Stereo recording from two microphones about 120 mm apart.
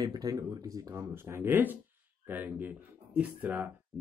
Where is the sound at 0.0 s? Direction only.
35° right (ahead or behind).